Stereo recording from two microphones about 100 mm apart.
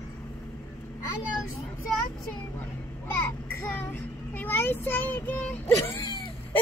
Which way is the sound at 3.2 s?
20° left (ahead or behind).